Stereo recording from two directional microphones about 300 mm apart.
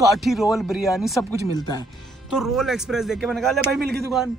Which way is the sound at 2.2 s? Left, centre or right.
Centre.